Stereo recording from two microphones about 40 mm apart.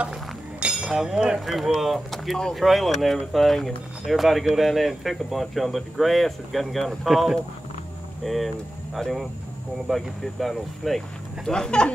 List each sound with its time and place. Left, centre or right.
0.6 s a sound: right
0.8 s speech: centre
1.4 s speech: centre
11.4 s speech: centre